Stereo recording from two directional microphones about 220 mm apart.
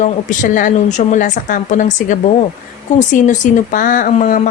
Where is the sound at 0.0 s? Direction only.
35° left (ahead or behind).